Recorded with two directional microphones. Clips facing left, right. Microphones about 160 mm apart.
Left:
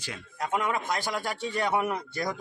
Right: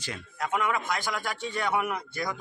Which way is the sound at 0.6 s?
30° left (ahead or behind).